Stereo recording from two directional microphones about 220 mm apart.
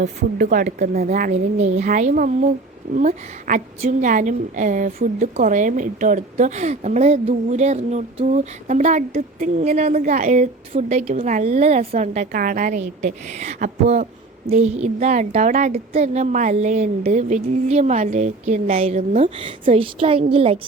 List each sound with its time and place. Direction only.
0.0 s a woman's voice: 35° right (ahead or behind)